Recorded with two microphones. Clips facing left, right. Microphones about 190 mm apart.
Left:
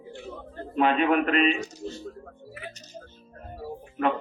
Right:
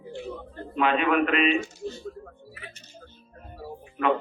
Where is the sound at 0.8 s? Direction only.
40° left (ahead or behind).